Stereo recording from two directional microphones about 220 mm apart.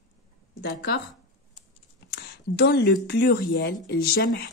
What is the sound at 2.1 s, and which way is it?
A woman's voice, 50° left (ahead or behind).